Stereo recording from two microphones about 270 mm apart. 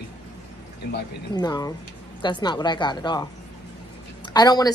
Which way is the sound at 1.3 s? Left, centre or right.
Centre.